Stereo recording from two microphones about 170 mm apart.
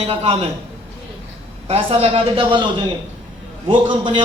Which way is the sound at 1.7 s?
35° right (ahead or behind).